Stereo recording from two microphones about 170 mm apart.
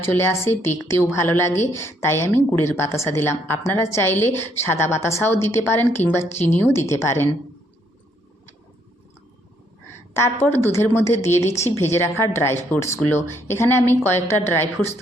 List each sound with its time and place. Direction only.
0.0 s a woman's voice: 15° left (ahead or behind)
10.2 s a woman's voice: 15° left (ahead or behind)